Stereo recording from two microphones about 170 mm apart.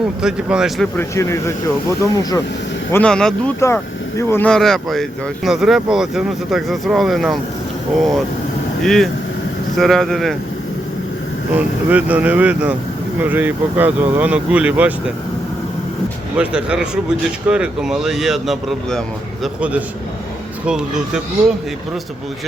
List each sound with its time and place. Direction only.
0.0 s speech: 5° right (ahead or behind)
0.9 s speech: 15° left (ahead or behind)
2.9 s speech: 5° left (ahead or behind)
11.5 s speech: 10° right (ahead or behind)
16.4 s speech: 5° right (ahead or behind)
20.7 s speech: 5° right (ahead or behind)